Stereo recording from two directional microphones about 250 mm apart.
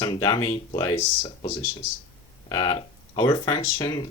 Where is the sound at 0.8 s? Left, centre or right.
Centre.